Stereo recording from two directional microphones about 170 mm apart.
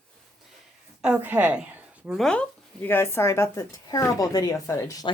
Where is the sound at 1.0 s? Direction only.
10° right (ahead or behind); by 5.1 s 20° left (ahead or behind).